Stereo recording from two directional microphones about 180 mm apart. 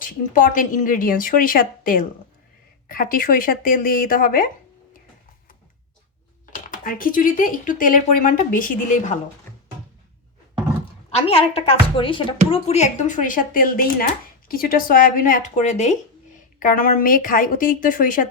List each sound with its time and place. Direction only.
0.0 s speech: 50° left (ahead or behind)
6.5 s speech: 50° left (ahead or behind)
11.1 s a woman's voice: 35° left (ahead or behind)